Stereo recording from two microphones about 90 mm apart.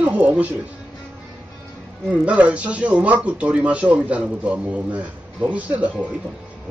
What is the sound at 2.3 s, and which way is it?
Speech, 15° right (ahead or behind).